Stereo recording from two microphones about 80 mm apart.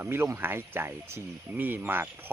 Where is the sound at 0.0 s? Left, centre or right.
Right.